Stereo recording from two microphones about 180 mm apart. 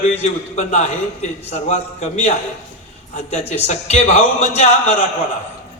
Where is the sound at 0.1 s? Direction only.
40° left (ahead or behind).